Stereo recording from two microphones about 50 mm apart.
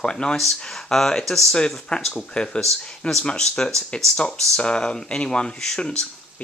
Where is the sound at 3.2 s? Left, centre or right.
Centre.